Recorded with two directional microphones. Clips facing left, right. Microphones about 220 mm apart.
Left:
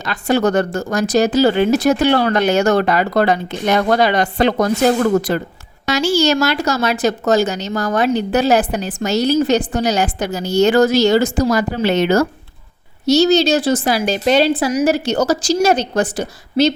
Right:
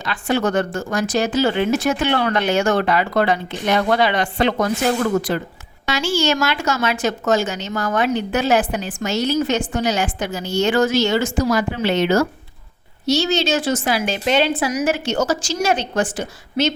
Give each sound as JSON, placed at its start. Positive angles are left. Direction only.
{"t": 0.0, "sound": "a woman's voice", "side_deg": 40}